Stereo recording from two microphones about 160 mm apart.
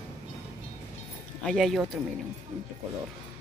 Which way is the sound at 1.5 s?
Centre (ahead or behind).